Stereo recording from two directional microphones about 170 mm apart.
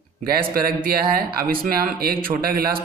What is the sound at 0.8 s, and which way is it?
A man's voice, 60° right (ahead or behind).